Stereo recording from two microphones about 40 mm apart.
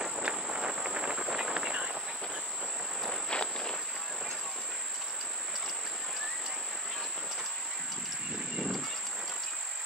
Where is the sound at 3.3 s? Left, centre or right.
Left.